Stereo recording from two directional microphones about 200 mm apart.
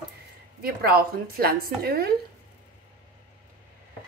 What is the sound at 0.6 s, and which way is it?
Speech, 50° right (ahead or behind).